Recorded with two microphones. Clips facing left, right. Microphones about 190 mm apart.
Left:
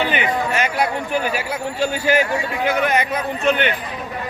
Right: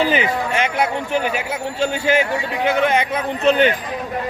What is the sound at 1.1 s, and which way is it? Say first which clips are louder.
Speech: right 1 dB; 20° right (ahead or behind).